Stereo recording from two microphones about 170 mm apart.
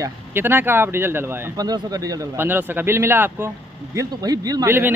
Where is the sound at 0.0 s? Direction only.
10° right (ahead or behind).